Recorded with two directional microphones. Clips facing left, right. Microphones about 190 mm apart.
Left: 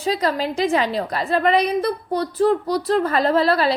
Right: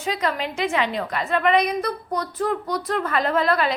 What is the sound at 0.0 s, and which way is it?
A woman's voice, 35° left (ahead or behind).